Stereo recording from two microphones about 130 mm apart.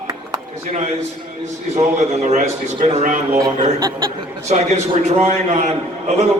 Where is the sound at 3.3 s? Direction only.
30° right (ahead or behind).